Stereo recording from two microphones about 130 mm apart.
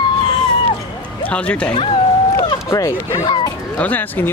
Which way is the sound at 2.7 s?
25° left (ahead or behind).